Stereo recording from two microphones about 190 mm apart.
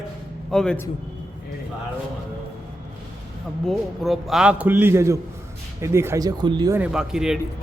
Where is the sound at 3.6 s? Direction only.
Centre (ahead or behind); by 6.8 s 20° right (ahead or behind).